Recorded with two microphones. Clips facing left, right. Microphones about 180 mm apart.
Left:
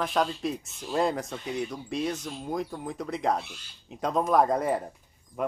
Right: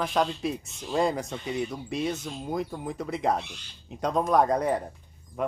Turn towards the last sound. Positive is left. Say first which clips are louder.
# right 1 dB
turn(degrees=0)  # may be behind; listen again after turning